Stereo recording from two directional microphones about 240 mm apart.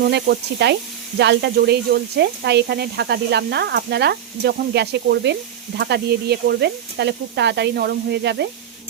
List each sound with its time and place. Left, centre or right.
0.0 s speech: right